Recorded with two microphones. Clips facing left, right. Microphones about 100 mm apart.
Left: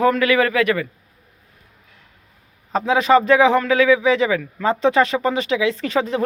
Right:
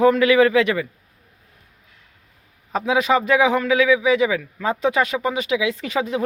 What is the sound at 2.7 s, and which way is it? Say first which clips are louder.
A man's voice: left 3 dB; 5° right (ahead or behind).